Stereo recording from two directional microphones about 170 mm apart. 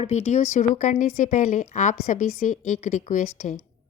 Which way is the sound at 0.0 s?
40° left (ahead or behind).